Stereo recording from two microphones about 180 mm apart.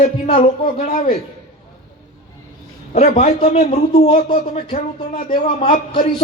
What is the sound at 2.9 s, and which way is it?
A man's voice, 40° left (ahead or behind).